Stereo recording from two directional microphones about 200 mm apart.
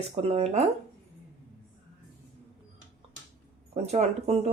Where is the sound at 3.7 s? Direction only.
35° right (ahead or behind).